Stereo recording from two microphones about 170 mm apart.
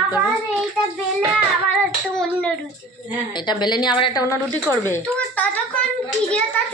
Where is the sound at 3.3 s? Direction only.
25° left (ahead or behind).